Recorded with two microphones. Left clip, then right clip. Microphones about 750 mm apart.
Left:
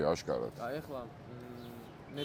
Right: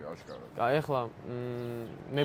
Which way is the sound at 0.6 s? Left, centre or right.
Right.